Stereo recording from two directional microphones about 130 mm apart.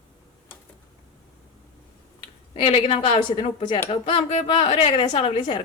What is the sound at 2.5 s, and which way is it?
A woman's voice, 45° left (ahead or behind).